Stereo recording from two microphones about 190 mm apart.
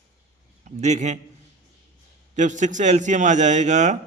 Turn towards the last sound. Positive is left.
turn(degrees=-40)  # may be behind; listen again after turning